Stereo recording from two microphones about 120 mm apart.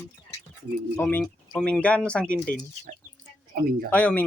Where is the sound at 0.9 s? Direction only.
15° left (ahead or behind).